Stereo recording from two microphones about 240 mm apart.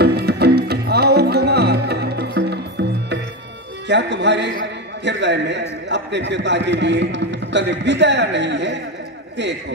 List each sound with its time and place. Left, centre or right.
0.0 s music: right
3.8 s a man's voice: right